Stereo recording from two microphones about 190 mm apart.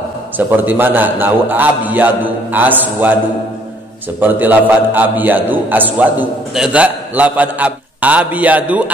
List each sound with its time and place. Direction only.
0.5 s a man's voice: 10° right (ahead or behind)
4.2 s a man's voice: 10° right (ahead or behind)